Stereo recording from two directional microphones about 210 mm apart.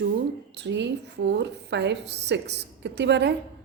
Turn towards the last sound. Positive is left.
turn(degrees=-55)  # may be behind; listen again after turning